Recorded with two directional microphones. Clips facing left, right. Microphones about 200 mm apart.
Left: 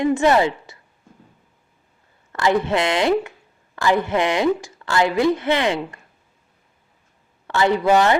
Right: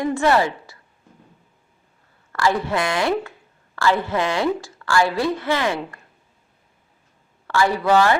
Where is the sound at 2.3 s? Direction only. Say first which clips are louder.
Left 2 dB; 20° left (ahead or behind).